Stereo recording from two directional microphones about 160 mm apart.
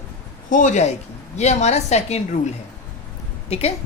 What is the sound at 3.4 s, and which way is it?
Speech, 40° left (ahead or behind).